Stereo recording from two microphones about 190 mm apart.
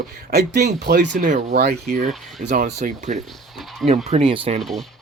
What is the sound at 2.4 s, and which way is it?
Speech, 40° right (ahead or behind).